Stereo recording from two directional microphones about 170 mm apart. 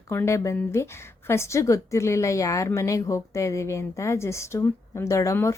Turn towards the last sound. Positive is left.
turn(degrees=15)  # may be behind; listen again after turning